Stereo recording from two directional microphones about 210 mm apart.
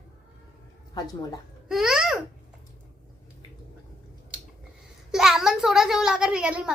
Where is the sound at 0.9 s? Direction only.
20° left (ahead or behind).